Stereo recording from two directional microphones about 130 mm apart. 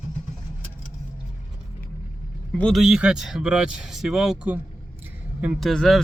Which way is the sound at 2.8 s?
5° right (ahead or behind).